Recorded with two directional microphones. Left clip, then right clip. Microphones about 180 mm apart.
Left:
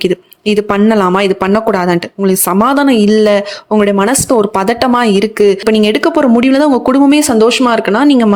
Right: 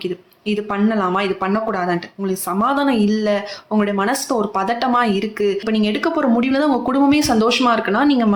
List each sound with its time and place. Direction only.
0.0 s speech: 60° left (ahead or behind)